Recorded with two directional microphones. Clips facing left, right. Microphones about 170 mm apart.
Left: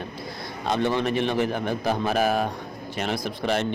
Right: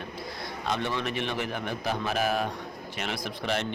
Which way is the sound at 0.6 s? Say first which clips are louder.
Left 7 dB; 35° left (ahead or behind).